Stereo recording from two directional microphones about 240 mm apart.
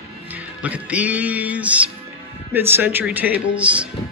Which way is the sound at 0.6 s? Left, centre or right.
Centre.